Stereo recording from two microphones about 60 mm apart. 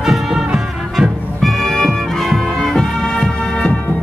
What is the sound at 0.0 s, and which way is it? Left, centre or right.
Music, centre.